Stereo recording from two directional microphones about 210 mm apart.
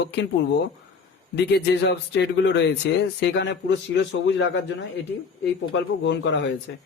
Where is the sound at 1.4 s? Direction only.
55° left (ahead or behind).